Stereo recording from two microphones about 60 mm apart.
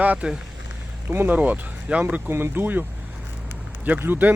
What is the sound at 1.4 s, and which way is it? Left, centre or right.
Speech, right.